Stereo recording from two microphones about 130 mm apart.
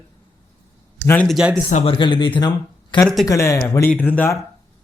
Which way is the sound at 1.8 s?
40° left (ahead or behind).